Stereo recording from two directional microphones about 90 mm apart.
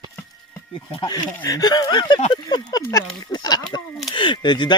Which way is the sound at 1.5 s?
45° left (ahead or behind).